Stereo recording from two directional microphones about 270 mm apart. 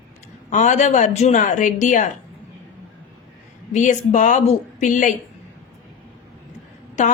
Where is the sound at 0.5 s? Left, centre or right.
Left.